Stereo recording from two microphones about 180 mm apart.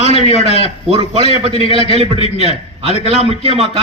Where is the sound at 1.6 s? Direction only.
30° left (ahead or behind).